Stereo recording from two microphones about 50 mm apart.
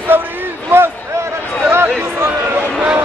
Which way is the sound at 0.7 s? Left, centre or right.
Right.